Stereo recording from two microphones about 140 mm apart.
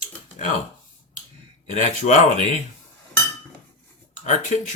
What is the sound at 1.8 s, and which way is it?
Speech, 55° left (ahead or behind).